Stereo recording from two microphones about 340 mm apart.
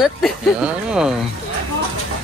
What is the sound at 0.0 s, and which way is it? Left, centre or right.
Speech, centre.